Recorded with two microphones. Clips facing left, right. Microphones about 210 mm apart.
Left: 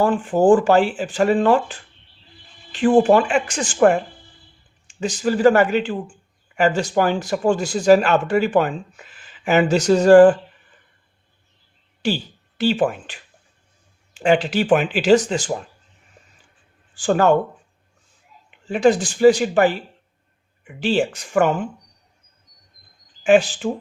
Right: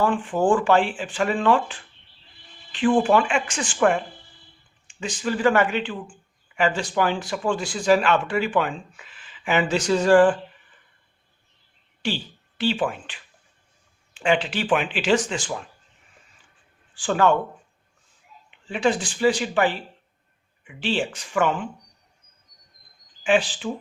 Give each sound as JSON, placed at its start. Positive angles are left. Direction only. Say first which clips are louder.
{"t": 0.0, "sound": "speech", "louder": "left 5 dB", "side_deg": 40}
{"t": 12.0, "sound": "speech", "louder": "left 5 dB", "side_deg": 40}
{"t": 16.9, "sound": "speech", "louder": "left 4 dB", "side_deg": 40}
{"t": 18.6, "sound": "speech", "louder": "left 6 dB", "side_deg": 40}
{"t": 23.2, "sound": "speech", "louder": "left 6 dB", "side_deg": 45}